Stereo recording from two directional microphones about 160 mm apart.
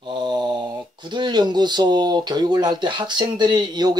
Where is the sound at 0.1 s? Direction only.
30° right (ahead or behind).